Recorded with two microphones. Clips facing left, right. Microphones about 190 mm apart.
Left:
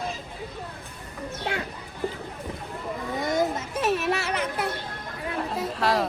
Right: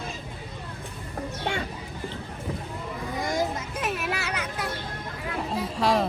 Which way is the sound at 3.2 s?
25° left (ahead or behind).